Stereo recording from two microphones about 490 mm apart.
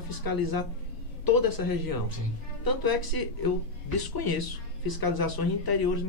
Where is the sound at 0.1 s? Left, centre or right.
Left.